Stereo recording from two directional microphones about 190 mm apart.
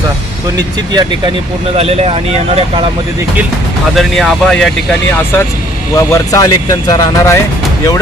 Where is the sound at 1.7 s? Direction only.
35° right (ahead or behind).